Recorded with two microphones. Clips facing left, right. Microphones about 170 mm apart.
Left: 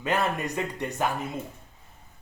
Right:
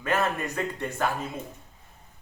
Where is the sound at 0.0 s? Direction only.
15° left (ahead or behind).